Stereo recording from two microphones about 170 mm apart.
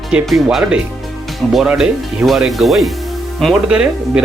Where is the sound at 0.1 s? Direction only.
5° right (ahead or behind).